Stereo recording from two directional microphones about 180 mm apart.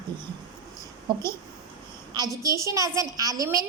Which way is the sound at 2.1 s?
20° right (ahead or behind).